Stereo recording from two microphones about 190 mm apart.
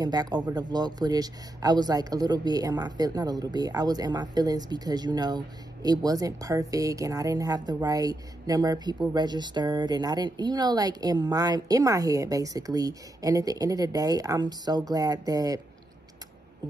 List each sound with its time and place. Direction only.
0.0 s speech: 20° right (ahead or behind)